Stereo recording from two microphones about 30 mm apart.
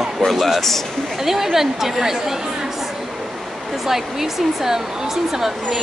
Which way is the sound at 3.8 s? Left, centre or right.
Centre.